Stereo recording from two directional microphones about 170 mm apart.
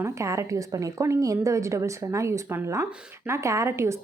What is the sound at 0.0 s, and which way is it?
A woman's voice, 15° right (ahead or behind).